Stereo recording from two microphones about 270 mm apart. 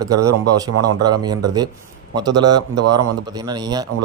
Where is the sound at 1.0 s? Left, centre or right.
Centre.